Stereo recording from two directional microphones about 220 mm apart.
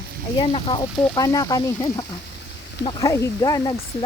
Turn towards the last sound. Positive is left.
turn(degrees=15)  # may be behind; listen again after turning